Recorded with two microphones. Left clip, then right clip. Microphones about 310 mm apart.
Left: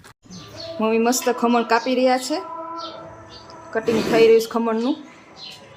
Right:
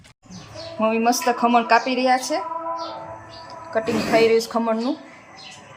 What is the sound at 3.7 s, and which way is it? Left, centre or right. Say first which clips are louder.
Speech: left 1 dB; centre.